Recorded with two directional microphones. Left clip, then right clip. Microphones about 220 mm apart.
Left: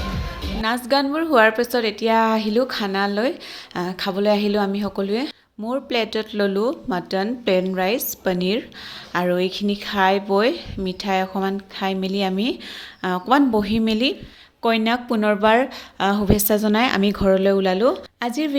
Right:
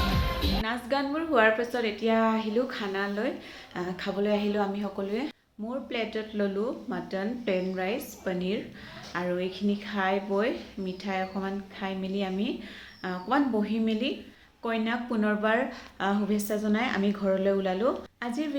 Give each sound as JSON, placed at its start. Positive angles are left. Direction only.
{"t": 0.6, "sound": "a woman's voice", "side_deg": 50}